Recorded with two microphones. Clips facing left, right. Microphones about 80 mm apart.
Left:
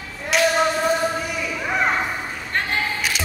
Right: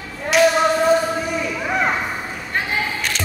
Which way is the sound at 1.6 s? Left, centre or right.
Centre.